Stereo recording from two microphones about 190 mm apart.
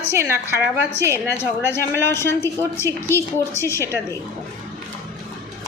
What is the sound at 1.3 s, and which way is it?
A woman's voice, 15° left (ahead or behind).